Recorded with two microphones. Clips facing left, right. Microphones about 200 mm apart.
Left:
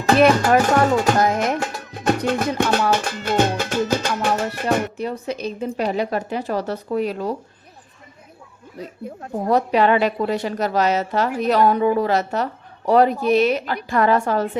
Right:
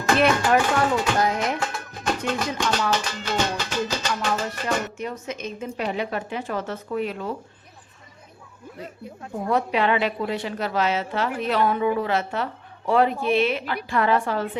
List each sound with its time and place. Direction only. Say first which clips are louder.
0.2 s music: left 5 dB; 40° left (ahead or behind)
1.9 s music: left 7 dB; 60° left (ahead or behind)
4.9 s a woman's voice: left 5 dB; 35° left (ahead or behind)
9.3 s a woman's voice: left 5 dB; 35° left (ahead or behind)